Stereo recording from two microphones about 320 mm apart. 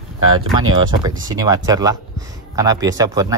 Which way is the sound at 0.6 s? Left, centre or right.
Centre.